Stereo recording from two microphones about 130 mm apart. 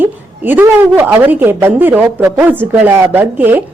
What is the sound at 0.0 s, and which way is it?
A woman's voice, 15° right (ahead or behind).